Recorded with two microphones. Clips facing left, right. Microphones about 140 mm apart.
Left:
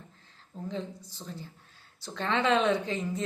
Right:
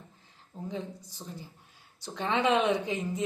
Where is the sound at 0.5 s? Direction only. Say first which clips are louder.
Left 1 dB; 15° right (ahead or behind).